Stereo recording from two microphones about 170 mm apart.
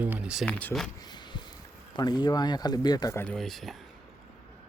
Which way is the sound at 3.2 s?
Centre (ahead or behind).